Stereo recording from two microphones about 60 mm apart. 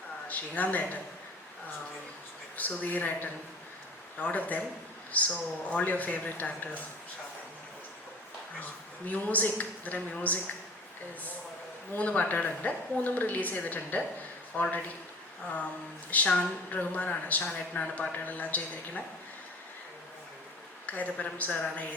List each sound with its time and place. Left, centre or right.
0.3 s speech: left
2.6 s speech: left
9.1 s speech: left
10.1 s a woman's voice: centre
11.9 s a woman's voice: left
16.0 s speech: left
20.8 s speech: left